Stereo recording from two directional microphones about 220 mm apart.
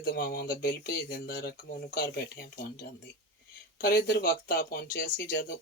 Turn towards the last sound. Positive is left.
turn(degrees=40)  # may be behind; listen again after turning